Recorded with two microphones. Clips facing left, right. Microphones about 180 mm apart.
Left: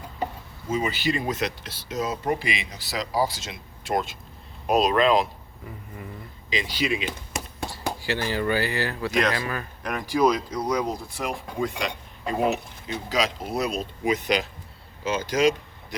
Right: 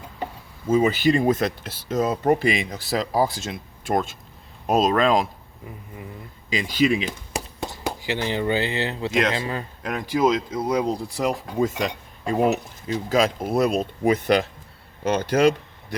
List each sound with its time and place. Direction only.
0.9 s speech: 45° right (ahead or behind)
6.5 s speech: 50° right (ahead or behind)
7.6 s speech: 20° right (ahead or behind); by 16.0 s 60° right (ahead or behind)